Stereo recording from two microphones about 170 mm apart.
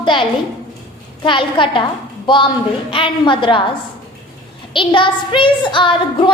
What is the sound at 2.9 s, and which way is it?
Speech, 30° left (ahead or behind).